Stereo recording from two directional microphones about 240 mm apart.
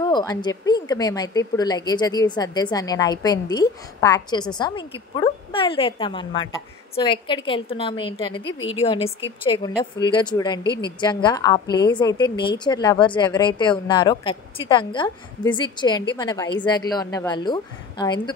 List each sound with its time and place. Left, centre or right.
0.0 s a woman's voice: centre